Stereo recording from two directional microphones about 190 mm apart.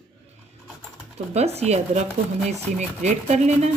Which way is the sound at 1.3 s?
35° right (ahead or behind).